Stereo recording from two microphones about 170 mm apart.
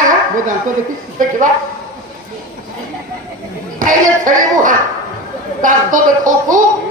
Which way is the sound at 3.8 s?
50° right (ahead or behind).